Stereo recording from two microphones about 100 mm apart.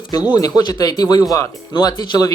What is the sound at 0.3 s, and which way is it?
Speech, 40° left (ahead or behind).